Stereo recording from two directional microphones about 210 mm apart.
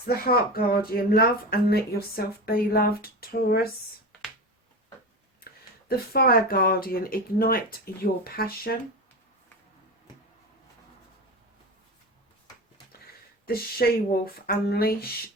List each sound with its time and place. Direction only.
0.0 s speech: 45° left (ahead or behind)
5.9 s speech: 45° left (ahead or behind)
13.4 s speech: 45° left (ahead or behind)